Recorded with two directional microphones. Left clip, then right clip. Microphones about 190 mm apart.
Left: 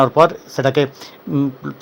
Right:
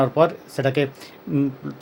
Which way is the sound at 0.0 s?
20° left (ahead or behind).